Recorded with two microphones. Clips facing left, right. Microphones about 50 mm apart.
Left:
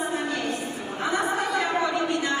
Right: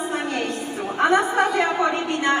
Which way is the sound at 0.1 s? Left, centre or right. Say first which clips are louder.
Right 2 dB; right.